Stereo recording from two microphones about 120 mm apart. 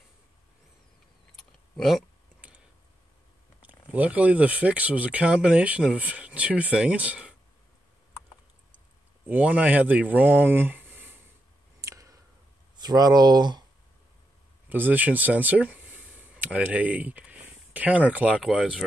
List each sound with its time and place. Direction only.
1.3 s typing: centre (ahead or behind)
2.4 s a sound: 10° right (ahead or behind)
3.6 s speech: 15° right (ahead or behind)
9.3 s speech: 10° right (ahead or behind)
11.8 s clicking: 25° right (ahead or behind)
12.8 s speech: 35° right (ahead or behind)
14.7 s speech: 15° right (ahead or behind)